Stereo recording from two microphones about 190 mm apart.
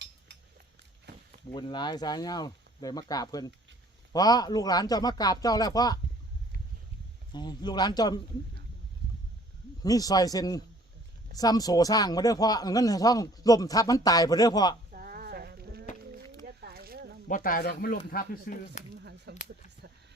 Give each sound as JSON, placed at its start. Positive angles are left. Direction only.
{"t": 1.5, "sound": "speech", "side_deg": 25}
{"t": 7.3, "sound": "speech", "side_deg": 20}
{"t": 9.8, "sound": "speech", "side_deg": 20}
{"t": 14.9, "sound": "a sound", "side_deg": -50}
{"t": 17.2, "sound": "speech", "side_deg": 45}